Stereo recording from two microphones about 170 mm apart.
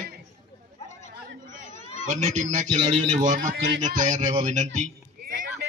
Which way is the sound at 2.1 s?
45° right (ahead or behind).